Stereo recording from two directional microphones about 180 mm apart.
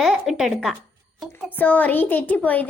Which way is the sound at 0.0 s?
Centre (ahead or behind).